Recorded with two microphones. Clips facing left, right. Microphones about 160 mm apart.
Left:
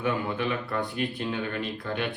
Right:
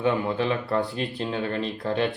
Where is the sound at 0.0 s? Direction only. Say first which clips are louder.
Right 4 dB; 30° right (ahead or behind).